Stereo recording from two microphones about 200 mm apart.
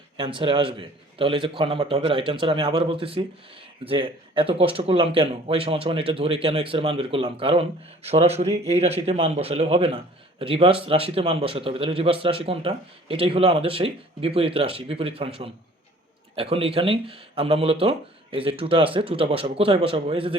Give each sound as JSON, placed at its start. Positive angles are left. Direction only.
{"t": 0.2, "sound": "a man's voice", "side_deg": -25}